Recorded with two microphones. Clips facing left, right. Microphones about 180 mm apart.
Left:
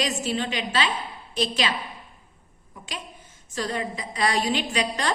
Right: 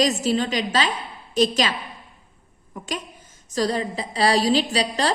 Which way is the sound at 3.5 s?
35° right (ahead or behind).